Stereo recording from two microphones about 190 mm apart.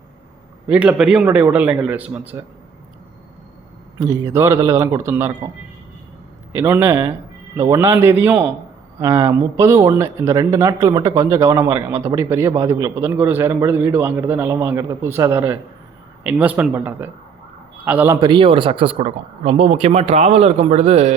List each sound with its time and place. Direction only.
0.7 s speech: 5° right (ahead or behind)
3.9 s speech: 15° right (ahead or behind)
6.5 s a man's voice: 15° right (ahead or behind); by 21.2 s 35° right (ahead or behind)